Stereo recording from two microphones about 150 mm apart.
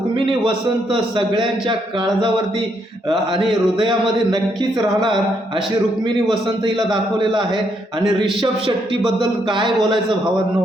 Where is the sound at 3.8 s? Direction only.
30° right (ahead or behind).